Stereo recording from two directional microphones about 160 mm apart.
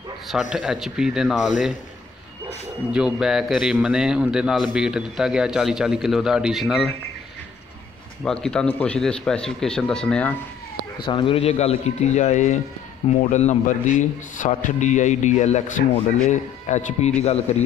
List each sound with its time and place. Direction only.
0.3 s a man's voice: 5° right (ahead or behind)
2.9 s a man's voice: 5° right (ahead or behind)
8.2 s a man's voice: 5° left (ahead or behind)
11.1 s speech: 30° left (ahead or behind); by 17.1 s 45° left (ahead or behind)